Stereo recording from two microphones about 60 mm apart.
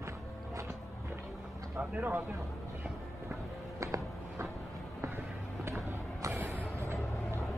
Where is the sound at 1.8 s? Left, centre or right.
Right.